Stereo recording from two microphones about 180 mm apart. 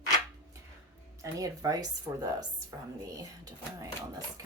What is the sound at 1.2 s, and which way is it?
A woman's voice, 20° right (ahead or behind).